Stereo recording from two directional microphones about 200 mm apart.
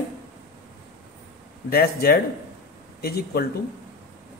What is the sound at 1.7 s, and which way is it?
A man's voice, 50° left (ahead or behind).